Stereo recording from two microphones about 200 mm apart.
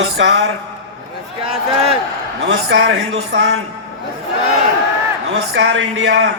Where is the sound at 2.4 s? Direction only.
65° right (ahead or behind).